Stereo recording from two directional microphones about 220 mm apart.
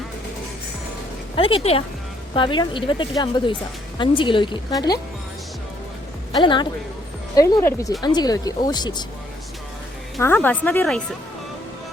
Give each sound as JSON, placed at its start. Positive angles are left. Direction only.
{"t": 1.4, "sound": "speech", "side_deg": 25}
{"t": 6.4, "sound": "speech", "side_deg": 20}
{"t": 10.2, "sound": "speech", "side_deg": 10}